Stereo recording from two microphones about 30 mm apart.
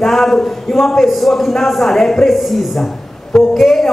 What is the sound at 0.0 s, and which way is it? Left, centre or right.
A man's voice, centre.